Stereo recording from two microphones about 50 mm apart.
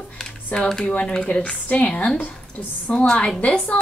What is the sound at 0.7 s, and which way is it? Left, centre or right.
Speech, centre.